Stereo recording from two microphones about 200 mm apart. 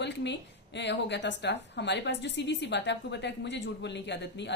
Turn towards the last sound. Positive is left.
turn(degrees=60)  # may be behind; listen again after turning